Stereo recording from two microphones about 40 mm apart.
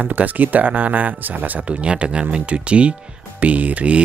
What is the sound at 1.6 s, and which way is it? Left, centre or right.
Speech, right.